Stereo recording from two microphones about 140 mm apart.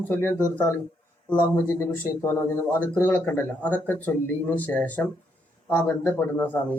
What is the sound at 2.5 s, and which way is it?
Speech, 15° left (ahead or behind).